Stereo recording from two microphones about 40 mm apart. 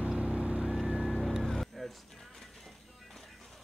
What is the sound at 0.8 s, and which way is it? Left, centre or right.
Vehicle, centre.